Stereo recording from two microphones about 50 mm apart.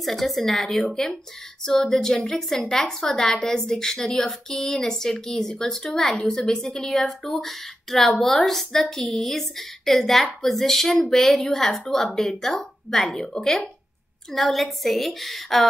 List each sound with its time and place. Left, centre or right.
0.0 s a woman's voice: centre